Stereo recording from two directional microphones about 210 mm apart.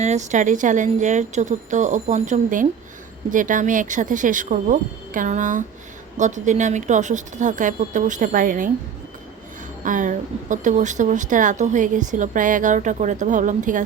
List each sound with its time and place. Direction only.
0.0 s a woman's voice: 35° right (ahead or behind)
9.8 s a woman's voice: 35° right (ahead or behind)